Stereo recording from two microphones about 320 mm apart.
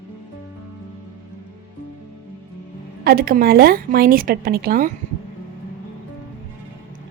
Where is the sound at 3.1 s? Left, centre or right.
Right.